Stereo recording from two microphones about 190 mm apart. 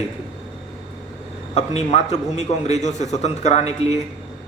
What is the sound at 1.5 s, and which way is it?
A man's voice, 35° left (ahead or behind).